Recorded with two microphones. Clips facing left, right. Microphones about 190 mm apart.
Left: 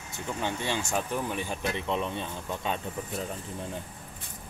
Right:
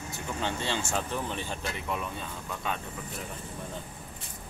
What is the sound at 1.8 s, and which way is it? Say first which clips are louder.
Speech: left 4 dB; 25° left (ahead or behind).